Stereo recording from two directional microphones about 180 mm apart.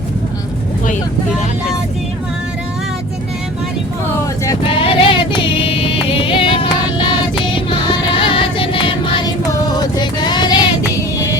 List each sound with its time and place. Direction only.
4.0 s vehicle: 15° left (ahead or behind)
4.6 s music: 30° left (ahead or behind)